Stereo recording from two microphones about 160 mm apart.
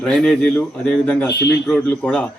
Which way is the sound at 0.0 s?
5° left (ahead or behind).